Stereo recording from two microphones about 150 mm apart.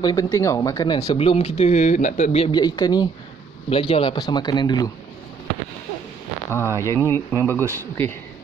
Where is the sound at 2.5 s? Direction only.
25° left (ahead or behind).